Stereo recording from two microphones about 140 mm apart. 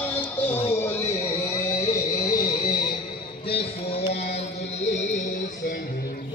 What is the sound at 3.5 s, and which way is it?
Music, 45° left (ahead or behind).